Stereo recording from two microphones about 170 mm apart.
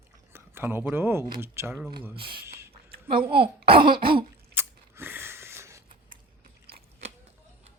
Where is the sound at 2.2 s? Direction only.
60° right (ahead or behind).